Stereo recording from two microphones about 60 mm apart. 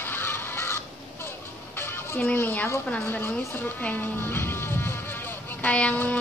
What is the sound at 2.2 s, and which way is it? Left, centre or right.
Speech, left.